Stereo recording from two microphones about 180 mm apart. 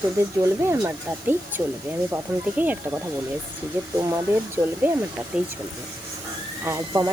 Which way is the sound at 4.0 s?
20° right (ahead or behind).